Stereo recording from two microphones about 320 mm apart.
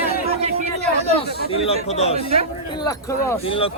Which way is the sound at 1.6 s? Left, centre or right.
Centre.